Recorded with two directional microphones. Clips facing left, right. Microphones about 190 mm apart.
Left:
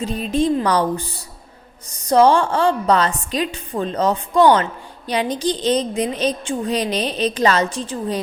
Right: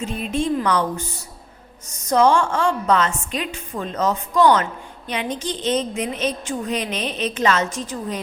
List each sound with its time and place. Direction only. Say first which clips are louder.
0.0 s a woman's voice: left 4 dB; 35° left (ahead or behind)